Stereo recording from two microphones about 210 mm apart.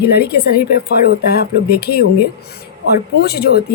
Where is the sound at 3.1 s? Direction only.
50° left (ahead or behind).